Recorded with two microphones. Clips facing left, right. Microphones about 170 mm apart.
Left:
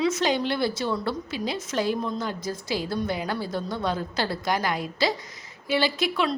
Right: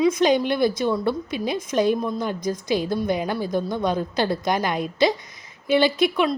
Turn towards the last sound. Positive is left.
turn(degrees=-20)  # may be behind; listen again after turning